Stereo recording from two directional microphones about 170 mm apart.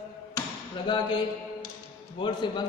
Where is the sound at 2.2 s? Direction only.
25° left (ahead or behind).